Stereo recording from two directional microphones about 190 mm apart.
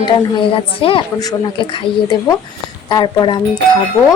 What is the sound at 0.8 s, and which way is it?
A woman's voice, 30° left (ahead or behind).